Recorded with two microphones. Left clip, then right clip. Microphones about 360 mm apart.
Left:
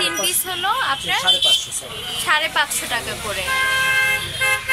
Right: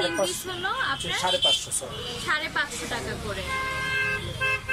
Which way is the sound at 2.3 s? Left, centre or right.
Centre.